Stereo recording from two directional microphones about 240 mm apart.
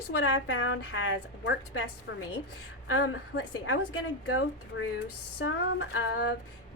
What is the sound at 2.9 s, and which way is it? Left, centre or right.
A woman's voice, left.